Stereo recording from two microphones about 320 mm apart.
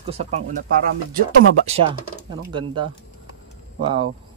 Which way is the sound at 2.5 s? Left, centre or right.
Centre.